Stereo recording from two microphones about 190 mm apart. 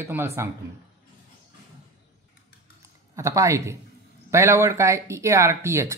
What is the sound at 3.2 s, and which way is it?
Speech, 15° right (ahead or behind).